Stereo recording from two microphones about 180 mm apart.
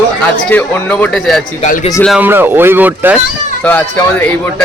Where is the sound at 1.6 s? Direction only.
45° left (ahead or behind).